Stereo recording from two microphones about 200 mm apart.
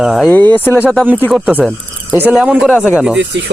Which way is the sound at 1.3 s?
5° right (ahead or behind).